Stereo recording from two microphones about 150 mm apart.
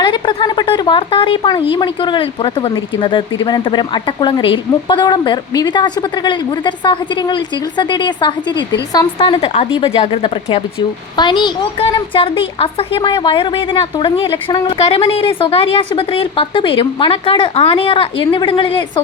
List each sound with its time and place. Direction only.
0.0 s a woman's voice: 30° left (ahead or behind)